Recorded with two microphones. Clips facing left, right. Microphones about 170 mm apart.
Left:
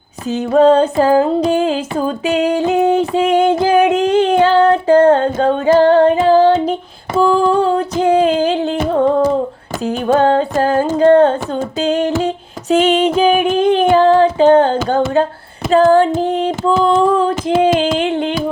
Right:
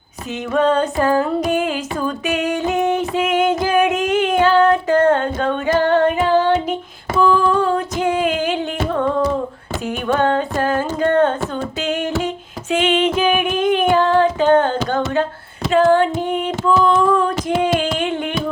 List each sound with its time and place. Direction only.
0.3 s music: 35° left (ahead or behind)
5.8 s child singing: 35° left (ahead or behind)
7.2 s music: 35° left (ahead or behind)
15.7 s female singing: 35° left (ahead or behind)
16.8 s a sound: 30° left (ahead or behind)